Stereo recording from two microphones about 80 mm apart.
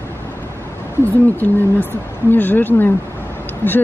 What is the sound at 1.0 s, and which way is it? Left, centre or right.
Speech, left.